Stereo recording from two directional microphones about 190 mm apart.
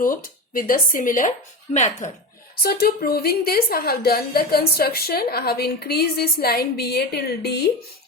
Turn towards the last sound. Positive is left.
turn(degrees=60)  # may be behind; listen again after turning